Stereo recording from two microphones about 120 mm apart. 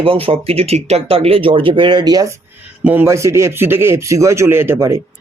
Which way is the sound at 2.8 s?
15° right (ahead or behind).